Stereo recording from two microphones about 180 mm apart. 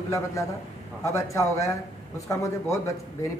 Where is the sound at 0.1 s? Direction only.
15° left (ahead or behind).